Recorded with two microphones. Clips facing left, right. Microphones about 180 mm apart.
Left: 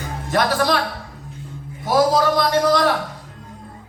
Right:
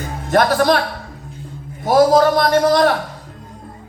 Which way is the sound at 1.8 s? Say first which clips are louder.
Right 5 dB; 50° right (ahead or behind).